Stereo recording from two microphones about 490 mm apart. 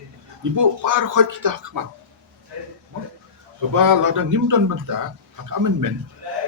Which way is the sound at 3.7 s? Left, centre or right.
Right.